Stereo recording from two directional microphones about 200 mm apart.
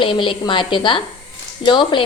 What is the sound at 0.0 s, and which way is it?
A woman's voice, 25° left (ahead or behind).